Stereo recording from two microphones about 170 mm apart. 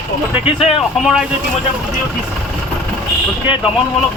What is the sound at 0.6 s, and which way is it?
Speech, 40° left (ahead or behind).